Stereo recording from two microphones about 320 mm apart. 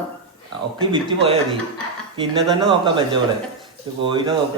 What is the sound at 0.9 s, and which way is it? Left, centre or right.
Speech, centre.